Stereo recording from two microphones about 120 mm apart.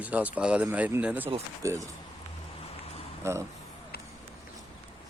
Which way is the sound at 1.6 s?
25° right (ahead or behind).